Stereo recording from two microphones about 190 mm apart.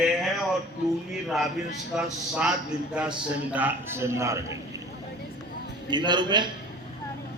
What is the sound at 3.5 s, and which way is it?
A man's voice, 10° right (ahead or behind).